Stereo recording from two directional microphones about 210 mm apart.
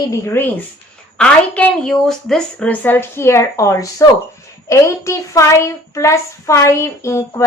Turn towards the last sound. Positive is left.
turn(degrees=10)  # may be behind; listen again after turning